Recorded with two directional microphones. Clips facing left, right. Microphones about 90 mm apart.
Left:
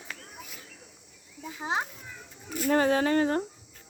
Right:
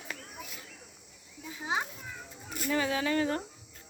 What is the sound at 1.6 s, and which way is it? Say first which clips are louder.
Speech: left 2 dB; 35° left (ahead or behind).